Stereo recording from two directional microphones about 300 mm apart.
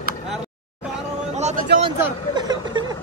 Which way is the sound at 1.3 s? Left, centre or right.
Right.